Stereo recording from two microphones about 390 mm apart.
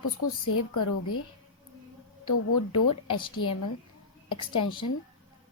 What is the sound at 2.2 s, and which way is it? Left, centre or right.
A woman's voice, left.